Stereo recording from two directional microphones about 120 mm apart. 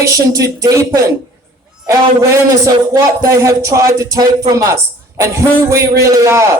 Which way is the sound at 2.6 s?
25° right (ahead or behind).